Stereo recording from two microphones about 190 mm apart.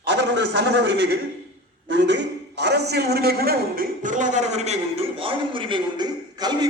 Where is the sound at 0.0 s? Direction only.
65° right (ahead or behind).